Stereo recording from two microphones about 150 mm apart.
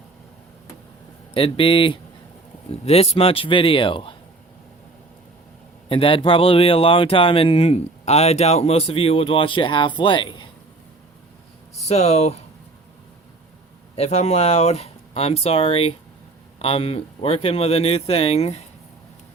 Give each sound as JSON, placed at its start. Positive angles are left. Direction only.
{"t": 1.3, "sound": "speech", "side_deg": 35}
{"t": 5.9, "sound": "speech", "side_deg": 35}
{"t": 11.9, "sound": "speech", "side_deg": 45}
{"t": 13.9, "sound": "speech", "side_deg": 45}